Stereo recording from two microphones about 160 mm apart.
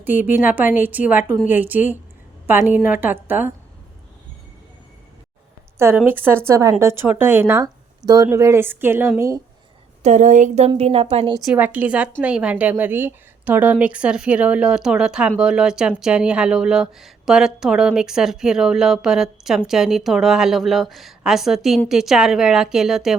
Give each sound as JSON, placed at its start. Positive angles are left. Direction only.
{"t": 0.0, "sound": "speech", "side_deg": -10}
{"t": 6.1, "sound": "speech", "side_deg": -10}
{"t": 10.0, "sound": "a woman's voice", "side_deg": -50}
{"t": 10.8, "sound": "speech", "side_deg": -40}
{"t": 11.4, "sound": "speech", "side_deg": -10}